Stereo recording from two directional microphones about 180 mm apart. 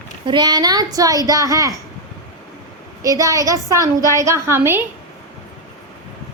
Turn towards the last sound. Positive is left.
turn(degrees=-15)  # may be behind; listen again after turning